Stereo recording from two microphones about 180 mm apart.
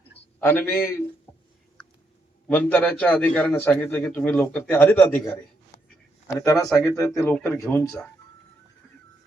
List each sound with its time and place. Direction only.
0.3 s a man's voice: 10° left (ahead or behind)
2.5 s a man's voice: 10° left (ahead or behind)